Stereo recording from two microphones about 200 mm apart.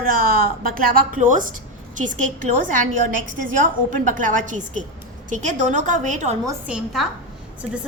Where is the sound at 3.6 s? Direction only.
40° right (ahead or behind).